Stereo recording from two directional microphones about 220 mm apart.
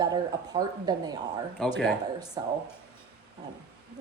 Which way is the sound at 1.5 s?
Centre (ahead or behind).